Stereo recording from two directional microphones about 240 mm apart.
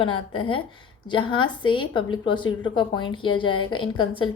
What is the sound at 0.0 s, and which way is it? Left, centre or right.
A woman's voice, left.